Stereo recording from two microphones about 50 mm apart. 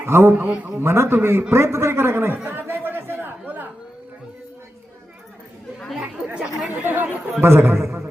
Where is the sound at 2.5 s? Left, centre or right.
Right.